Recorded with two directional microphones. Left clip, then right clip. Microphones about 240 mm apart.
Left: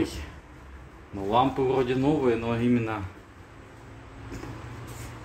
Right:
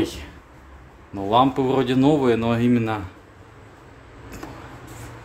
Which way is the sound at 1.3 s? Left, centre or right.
Right.